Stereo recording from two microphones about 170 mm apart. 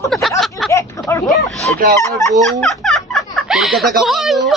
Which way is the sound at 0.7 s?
15° left (ahead or behind).